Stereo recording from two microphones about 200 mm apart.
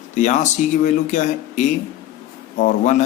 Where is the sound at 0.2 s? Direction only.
35° left (ahead or behind).